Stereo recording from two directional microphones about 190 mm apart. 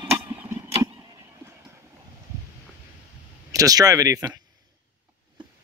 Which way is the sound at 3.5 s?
20° right (ahead or behind).